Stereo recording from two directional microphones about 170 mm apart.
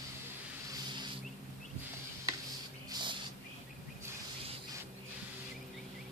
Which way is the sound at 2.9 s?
25° right (ahead or behind).